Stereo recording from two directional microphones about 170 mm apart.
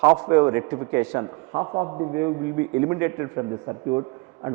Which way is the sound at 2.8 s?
20° right (ahead or behind).